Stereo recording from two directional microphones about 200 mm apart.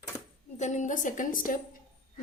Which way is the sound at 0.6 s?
35° left (ahead or behind).